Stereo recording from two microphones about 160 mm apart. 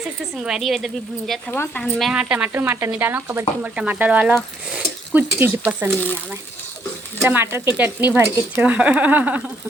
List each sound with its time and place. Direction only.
0.3 s speech: 5° right (ahead or behind)
1.5 s speech: 15° left (ahead or behind)
1.8 s speech: centre (ahead or behind)
7.2 s speech: 15° right (ahead or behind)